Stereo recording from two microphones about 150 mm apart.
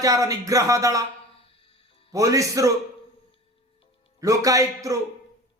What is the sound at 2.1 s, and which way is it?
Speech, 20° right (ahead or behind).